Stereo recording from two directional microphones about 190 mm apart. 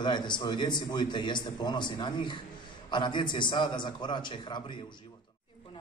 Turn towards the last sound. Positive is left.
turn(degrees=25)  # may be behind; listen again after turning